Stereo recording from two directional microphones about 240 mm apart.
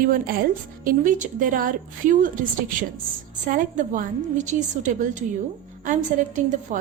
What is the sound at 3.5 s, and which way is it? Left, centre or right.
A woman's voice, right.